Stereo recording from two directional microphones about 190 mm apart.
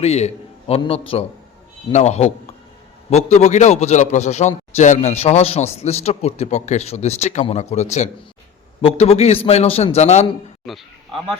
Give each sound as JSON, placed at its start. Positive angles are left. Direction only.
{"t": 0.0, "sound": "a man's voice", "side_deg": 35}
{"t": 10.7, "sound": "a man's voice", "side_deg": 0}